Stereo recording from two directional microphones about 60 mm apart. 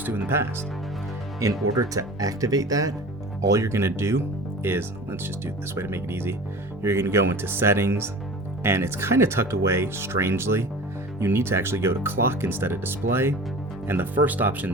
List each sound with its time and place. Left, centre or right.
0.0 s speech: right
1.7 s speech: right
3.4 s speech: right